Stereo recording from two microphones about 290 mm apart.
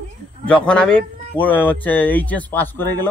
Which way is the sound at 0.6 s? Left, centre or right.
Centre.